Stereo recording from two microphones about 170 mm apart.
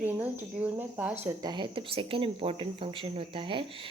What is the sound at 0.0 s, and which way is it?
Speech, 10° right (ahead or behind).